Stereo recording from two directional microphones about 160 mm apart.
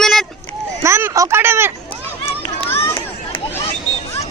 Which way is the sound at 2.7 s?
15° left (ahead or behind).